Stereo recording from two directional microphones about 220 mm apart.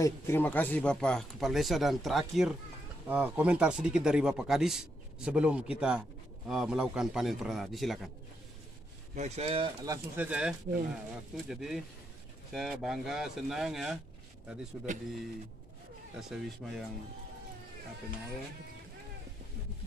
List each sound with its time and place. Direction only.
0.0 s speech: 10° left (ahead or behind)
9.1 s speech: 30° right (ahead or behind)
10.1 s speech: 5° right (ahead or behind)
16.2 s speech: centre (ahead or behind)